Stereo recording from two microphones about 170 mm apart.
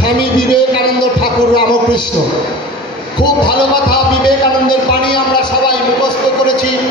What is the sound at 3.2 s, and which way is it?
Heart murmur, 25° left (ahead or behind).